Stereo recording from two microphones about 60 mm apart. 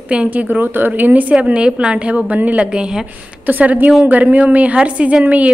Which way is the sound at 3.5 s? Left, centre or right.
Right.